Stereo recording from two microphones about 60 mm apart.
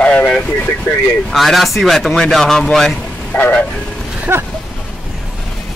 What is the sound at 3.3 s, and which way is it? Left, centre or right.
Speech, left.